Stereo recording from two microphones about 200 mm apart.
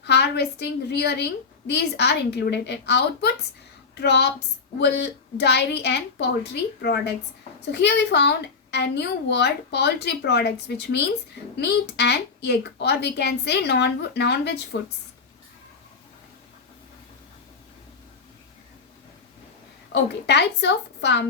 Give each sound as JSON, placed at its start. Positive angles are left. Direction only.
{"t": 0.0, "sound": "a woman's voice", "side_deg": 55}
{"t": 19.9, "sound": "a woman's voice", "side_deg": 60}